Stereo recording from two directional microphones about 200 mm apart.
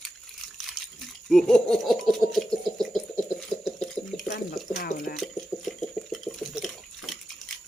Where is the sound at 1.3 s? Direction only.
Centre (ahead or behind).